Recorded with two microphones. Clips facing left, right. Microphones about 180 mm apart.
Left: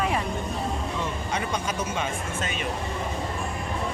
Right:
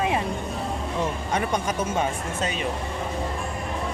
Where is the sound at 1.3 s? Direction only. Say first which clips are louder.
Right 3 dB; 45° right (ahead or behind).